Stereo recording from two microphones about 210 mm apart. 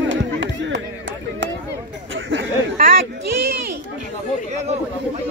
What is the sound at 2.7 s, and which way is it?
Speech, 40° right (ahead or behind).